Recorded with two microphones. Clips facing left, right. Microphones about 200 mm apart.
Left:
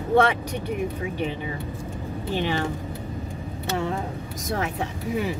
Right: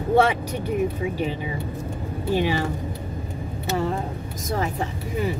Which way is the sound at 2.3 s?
10° right (ahead or behind).